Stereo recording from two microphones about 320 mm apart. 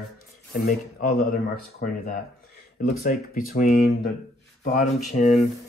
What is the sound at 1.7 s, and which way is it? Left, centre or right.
Speech, left.